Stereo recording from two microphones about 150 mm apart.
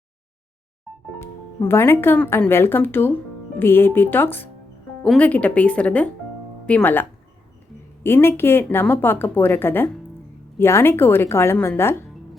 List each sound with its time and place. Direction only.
1.2 s a woman's voice: 15° left (ahead or behind)